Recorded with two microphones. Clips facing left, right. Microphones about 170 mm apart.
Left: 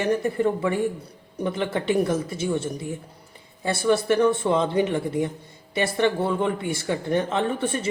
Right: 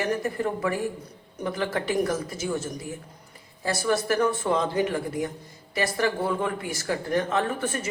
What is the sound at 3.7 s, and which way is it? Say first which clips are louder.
Speech: left 4 dB; 30° left (ahead or behind).